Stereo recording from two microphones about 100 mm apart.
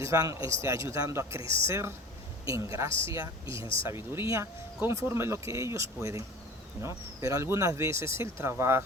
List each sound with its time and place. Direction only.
0.0 s a man's voice: 30° right (ahead or behind)